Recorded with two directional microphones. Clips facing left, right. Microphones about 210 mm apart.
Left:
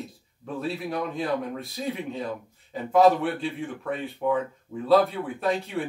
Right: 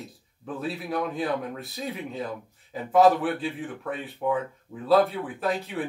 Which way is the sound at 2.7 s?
Centre (ahead or behind).